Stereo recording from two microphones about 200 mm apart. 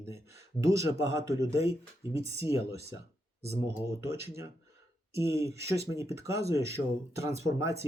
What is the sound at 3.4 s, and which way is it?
Speech, 15° right (ahead or behind).